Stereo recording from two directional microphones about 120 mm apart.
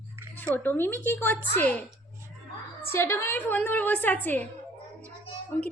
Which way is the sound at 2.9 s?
20° left (ahead or behind).